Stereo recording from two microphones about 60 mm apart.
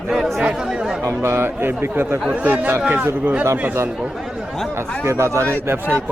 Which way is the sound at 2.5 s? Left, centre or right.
Right.